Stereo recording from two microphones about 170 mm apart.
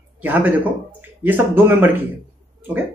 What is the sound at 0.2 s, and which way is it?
Speech, 10° right (ahead or behind).